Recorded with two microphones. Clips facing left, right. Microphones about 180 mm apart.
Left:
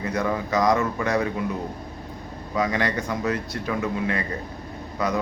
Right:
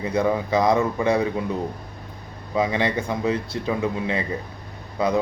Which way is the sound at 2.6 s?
25° right (ahead or behind).